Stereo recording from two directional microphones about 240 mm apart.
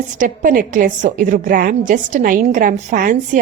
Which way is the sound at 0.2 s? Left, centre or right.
Right.